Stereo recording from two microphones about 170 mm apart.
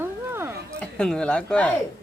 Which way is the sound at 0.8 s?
5° left (ahead or behind).